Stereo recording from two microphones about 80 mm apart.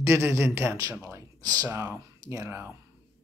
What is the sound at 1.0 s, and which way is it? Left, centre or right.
Speech, right.